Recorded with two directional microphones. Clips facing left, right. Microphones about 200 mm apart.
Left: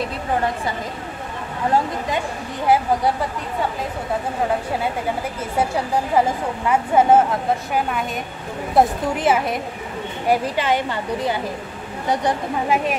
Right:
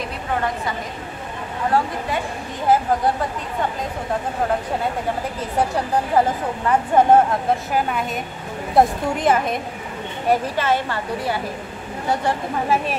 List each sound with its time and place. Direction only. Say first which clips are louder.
2.6 s a woman's voice: even; 10° left (ahead or behind)
6.1 s a woman's voice: even; 10° left (ahead or behind)